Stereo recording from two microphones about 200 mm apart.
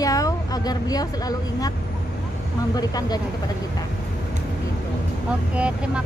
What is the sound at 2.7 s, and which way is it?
Speech, 20° left (ahead or behind).